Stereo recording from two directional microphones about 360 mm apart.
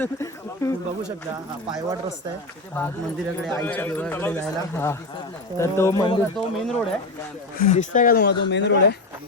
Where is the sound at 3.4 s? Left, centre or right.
Centre.